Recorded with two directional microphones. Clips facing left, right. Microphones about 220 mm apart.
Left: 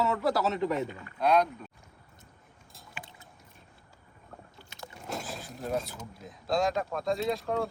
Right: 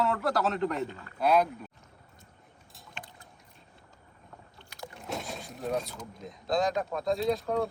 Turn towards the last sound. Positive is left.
turn(degrees=0)  # may be behind; listen again after turning